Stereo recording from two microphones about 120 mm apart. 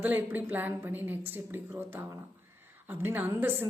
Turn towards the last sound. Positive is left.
turn(degrees=-15)  # may be behind; listen again after turning